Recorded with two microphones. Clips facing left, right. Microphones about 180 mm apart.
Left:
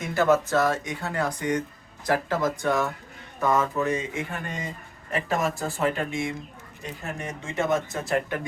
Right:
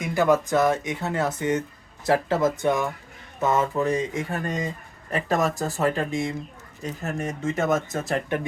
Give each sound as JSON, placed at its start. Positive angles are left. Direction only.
{"t": 0.0, "sound": "speech", "side_deg": -15}